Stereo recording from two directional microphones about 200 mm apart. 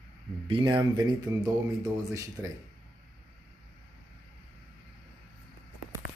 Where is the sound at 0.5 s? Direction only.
25° right (ahead or behind).